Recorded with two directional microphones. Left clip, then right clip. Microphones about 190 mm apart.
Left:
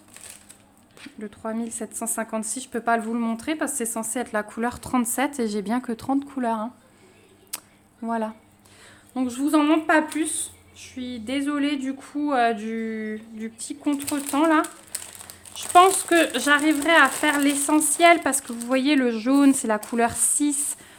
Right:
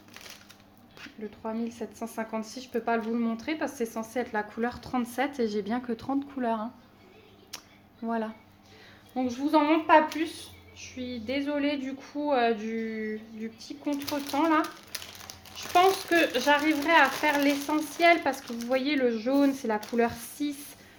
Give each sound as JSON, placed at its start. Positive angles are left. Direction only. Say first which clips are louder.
{"t": 1.2, "sound": "speech", "louder": "left 4 dB", "side_deg": 50}
{"t": 7.5, "sound": "a sound", "louder": "left 5 dB", "side_deg": 30}
{"t": 8.0, "sound": "speech", "louder": "left 5 dB", "side_deg": 30}
{"t": 9.1, "sound": "speech", "louder": "left 3 dB", "side_deg": 50}
{"t": 14.9, "sound": "crumpling", "louder": "left 1 dB", "side_deg": 0}
{"t": 15.5, "sound": "speech", "louder": "left 7 dB", "side_deg": 45}